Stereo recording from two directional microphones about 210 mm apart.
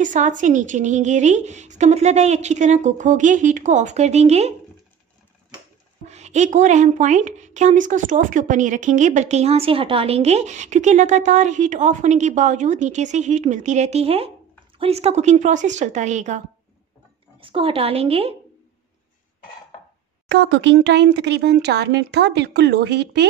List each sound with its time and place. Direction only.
0.0 s a woman's voice: 35° right (ahead or behind)
6.0 s a woman's voice: 30° right (ahead or behind)
20.2 s speech: 55° right (ahead or behind)